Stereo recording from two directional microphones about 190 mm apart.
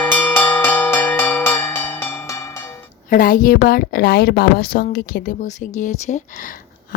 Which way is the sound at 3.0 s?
45° left (ahead or behind).